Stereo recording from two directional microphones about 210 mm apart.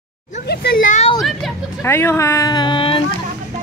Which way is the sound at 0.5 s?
50° left (ahead or behind).